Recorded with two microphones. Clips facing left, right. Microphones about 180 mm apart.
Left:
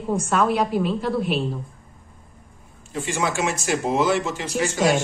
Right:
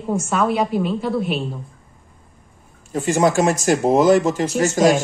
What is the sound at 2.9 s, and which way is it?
Speech, 40° right (ahead or behind).